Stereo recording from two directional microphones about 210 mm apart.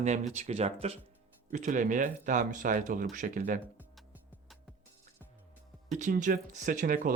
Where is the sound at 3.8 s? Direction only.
5° right (ahead or behind).